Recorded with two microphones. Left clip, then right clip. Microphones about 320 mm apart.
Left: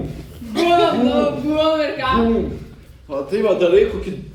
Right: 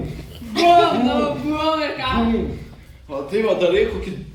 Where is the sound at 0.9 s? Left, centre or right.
Centre.